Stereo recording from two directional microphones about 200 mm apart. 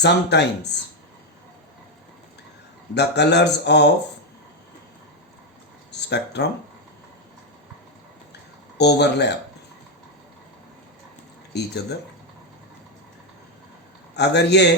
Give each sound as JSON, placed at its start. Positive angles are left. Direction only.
{"t": 0.0, "sound": "speech", "side_deg": 55}
{"t": 2.9, "sound": "speech", "side_deg": 60}
{"t": 6.1, "sound": "speech", "side_deg": 60}
{"t": 8.8, "sound": "speech", "side_deg": 55}
{"t": 11.5, "sound": "speech", "side_deg": 55}
{"t": 14.2, "sound": "speech", "side_deg": 55}